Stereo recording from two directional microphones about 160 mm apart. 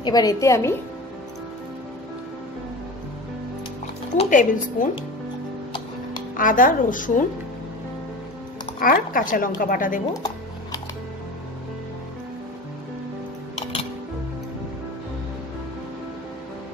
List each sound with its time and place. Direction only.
0.0 s a woman's voice: 25° left (ahead or behind)
4.1 s a woman's voice: 50° left (ahead or behind)
6.3 s a woman's voice: 55° left (ahead or behind)
8.7 s a woman's voice: 65° left (ahead or behind)
10.1 s music: 25° left (ahead or behind)